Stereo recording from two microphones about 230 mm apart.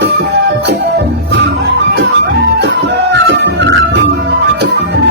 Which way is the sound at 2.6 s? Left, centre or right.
Right.